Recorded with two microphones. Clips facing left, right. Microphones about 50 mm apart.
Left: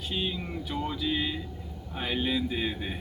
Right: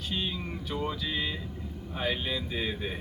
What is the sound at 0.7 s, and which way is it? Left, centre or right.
A man's voice, centre.